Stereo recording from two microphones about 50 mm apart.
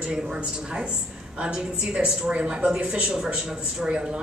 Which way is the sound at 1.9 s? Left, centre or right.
Right.